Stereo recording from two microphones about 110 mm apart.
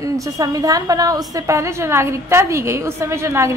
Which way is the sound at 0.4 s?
35° right (ahead or behind).